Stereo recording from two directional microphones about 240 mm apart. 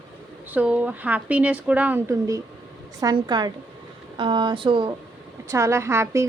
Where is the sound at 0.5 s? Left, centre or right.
Centre.